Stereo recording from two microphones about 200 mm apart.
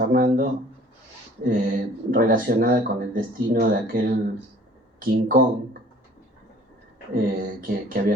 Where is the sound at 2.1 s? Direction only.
45° right (ahead or behind).